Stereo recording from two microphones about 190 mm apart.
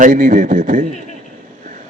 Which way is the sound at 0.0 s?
45° right (ahead or behind).